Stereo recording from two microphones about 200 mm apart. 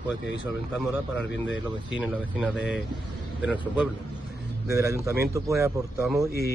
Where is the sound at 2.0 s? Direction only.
5° right (ahead or behind).